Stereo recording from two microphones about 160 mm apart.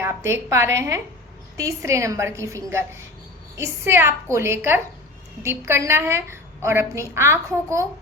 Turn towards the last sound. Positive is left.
turn(degrees=-20)  # may be behind; listen again after turning